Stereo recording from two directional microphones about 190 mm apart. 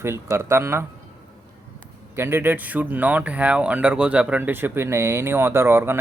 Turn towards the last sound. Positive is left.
turn(degrees=-10)  # may be behind; listen again after turning